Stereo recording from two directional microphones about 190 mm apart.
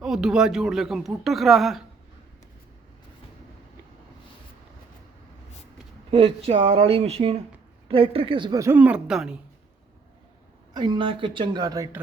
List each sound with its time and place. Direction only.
0.0 s speech: 5° right (ahead or behind)
6.1 s a woman's voice: 30° right (ahead or behind); by 9.4 s 5° right (ahead or behind)
10.8 s speech: 25° right (ahead or behind)